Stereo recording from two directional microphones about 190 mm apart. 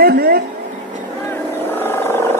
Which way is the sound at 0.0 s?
50° right (ahead or behind).